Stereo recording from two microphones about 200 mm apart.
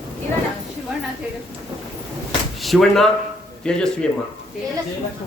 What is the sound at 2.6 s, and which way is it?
Speech, centre (ahead or behind).